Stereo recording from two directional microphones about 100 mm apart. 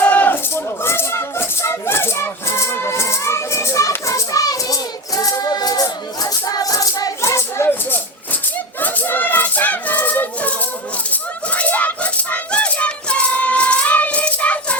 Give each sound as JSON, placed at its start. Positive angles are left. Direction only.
{"t": 0.0, "sound": "maraca", "side_deg": 15}
{"t": 8.8, "sound": "a sound", "side_deg": 15}
{"t": 11.1, "sound": "rattle", "side_deg": 15}